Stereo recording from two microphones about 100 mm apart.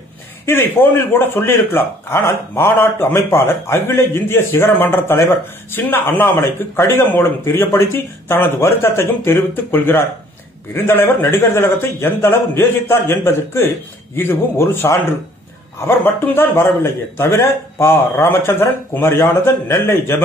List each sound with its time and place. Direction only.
0.5 s a man's voice: 25° left (ahead or behind)